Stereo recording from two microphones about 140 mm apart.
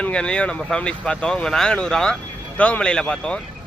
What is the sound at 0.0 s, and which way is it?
Speech, 5° left (ahead or behind).